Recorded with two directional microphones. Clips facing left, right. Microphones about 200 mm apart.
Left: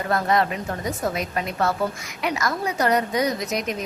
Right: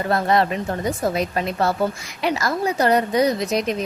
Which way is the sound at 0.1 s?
30° right (ahead or behind).